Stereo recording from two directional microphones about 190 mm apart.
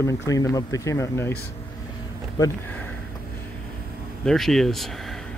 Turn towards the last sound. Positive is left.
turn(degrees=0)  # may be behind; listen again after turning